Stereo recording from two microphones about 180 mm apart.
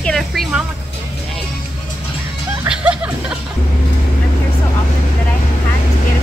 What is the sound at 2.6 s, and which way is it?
Music, 10° right (ahead or behind).